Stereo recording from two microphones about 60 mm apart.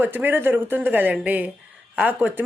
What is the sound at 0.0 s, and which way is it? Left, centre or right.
Speech, right.